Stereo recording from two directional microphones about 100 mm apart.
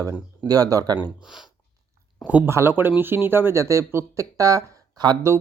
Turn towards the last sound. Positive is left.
turn(degrees=-40)  # may be behind; listen again after turning